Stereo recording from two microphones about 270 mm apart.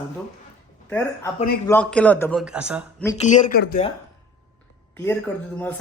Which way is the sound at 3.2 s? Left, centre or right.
Left.